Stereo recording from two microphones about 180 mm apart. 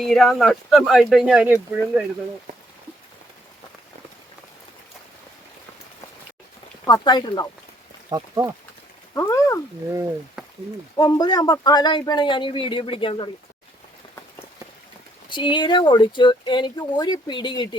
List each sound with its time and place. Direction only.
0.0 s speech: centre (ahead or behind)
6.8 s speech: 25° left (ahead or behind)
8.1 s speech: 20° right (ahead or behind)
9.1 s speech: 15° left (ahead or behind)
10.4 s a sound: 5° right (ahead or behind)
10.9 s speech: 20° left (ahead or behind)
15.3 s speech: 25° left (ahead or behind)